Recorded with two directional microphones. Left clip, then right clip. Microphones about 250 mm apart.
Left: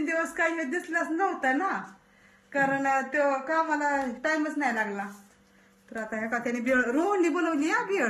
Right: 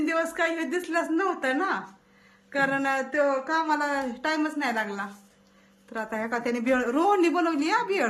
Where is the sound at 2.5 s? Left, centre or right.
Centre.